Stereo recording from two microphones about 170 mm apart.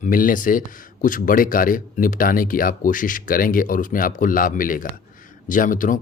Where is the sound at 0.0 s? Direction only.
55° left (ahead or behind).